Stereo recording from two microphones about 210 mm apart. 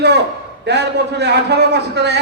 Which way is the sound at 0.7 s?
55° right (ahead or behind).